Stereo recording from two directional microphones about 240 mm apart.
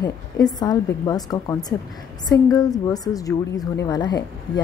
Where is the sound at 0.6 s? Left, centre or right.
Centre.